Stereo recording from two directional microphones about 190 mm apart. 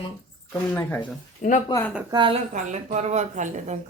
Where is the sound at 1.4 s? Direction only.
45° left (ahead or behind).